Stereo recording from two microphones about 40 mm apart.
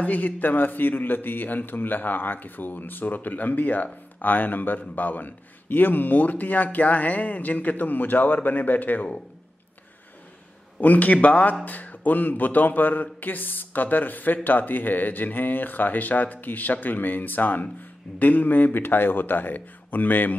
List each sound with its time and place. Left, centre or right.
0.0 s speech: left
10.8 s a man's voice: left